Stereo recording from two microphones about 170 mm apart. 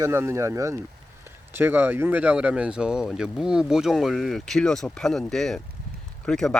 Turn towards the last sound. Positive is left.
turn(degrees=5)  # may be behind; listen again after turning